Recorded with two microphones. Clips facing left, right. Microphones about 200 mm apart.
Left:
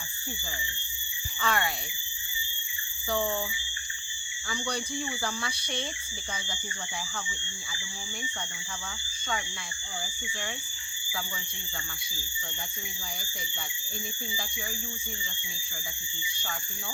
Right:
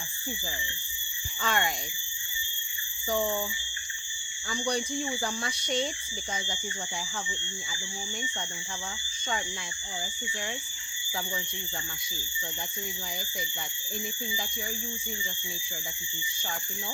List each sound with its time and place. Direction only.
1.4 s speech: 20° right (ahead or behind)
4.4 s speech: 40° right (ahead or behind)